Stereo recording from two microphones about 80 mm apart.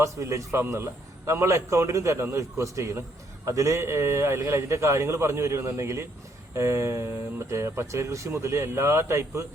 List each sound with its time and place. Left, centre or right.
0.0 s speech: right